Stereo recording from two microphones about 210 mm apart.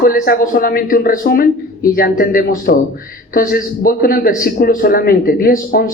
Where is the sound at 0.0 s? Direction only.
45° left (ahead or behind).